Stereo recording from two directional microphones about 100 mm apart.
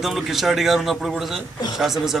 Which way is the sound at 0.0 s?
Centre (ahead or behind).